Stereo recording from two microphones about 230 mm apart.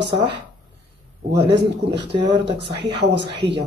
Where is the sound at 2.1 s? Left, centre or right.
Right.